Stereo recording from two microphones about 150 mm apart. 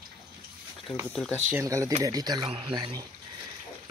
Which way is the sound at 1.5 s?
20° right (ahead or behind).